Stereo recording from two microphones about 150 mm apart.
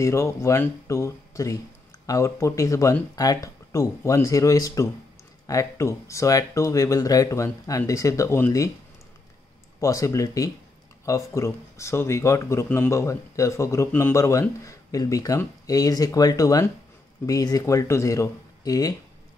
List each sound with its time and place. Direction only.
0.0 s speech: 20° left (ahead or behind)
9.8 s speech: 20° left (ahead or behind)